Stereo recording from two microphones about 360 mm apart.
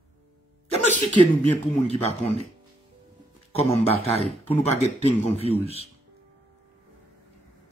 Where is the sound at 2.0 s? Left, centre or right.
Centre.